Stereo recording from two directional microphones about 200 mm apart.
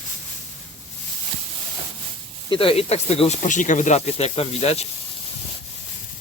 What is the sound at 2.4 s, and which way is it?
Speech, 25° left (ahead or behind).